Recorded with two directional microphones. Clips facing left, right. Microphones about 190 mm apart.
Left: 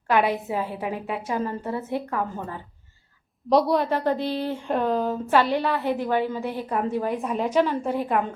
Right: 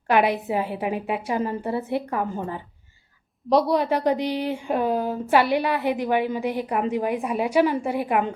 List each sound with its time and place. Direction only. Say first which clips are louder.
0.1 s a woman's voice: right 2 dB; 15° right (ahead or behind)
3.5 s a woman's voice: even; centre (ahead or behind)
3.8 s a woman's voice: right 2 dB; 15° right (ahead or behind)